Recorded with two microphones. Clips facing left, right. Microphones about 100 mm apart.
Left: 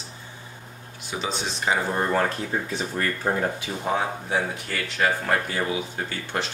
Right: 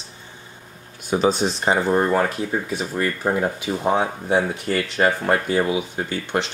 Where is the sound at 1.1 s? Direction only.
45° right (ahead or behind).